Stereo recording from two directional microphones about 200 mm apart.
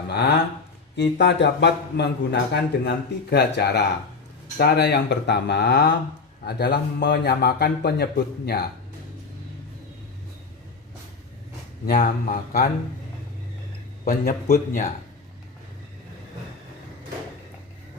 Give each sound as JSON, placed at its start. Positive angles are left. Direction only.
{"t": 0.9, "sound": "a man's voice", "side_deg": 60}
{"t": 11.9, "sound": "speech", "side_deg": 40}
{"t": 14.0, "sound": "speech", "side_deg": 40}